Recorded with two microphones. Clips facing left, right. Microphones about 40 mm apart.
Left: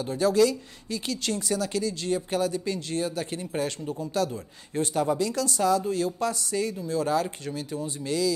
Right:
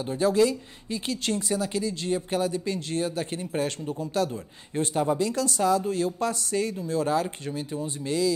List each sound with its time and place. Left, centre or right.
0.0 s speech: right
4.7 s speech: right